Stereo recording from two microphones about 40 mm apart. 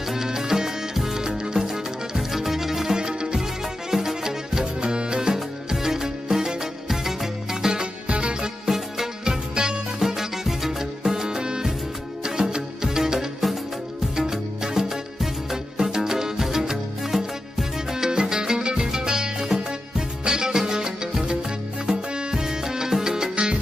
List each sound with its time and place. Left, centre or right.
0.1 s music: centre
3.0 s music: right
3.9 s music: centre
7.7 s music: right
8.6 s music: centre